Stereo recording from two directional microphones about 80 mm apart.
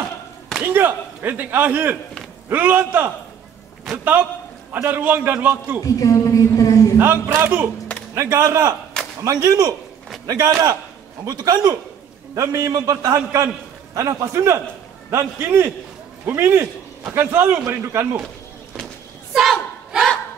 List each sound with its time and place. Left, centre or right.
0.7 s a man's voice: right
5.9 s a woman's voice: left
7.0 s a man's voice: right
8.1 s a man's voice: right
19.3 s battle cry: centre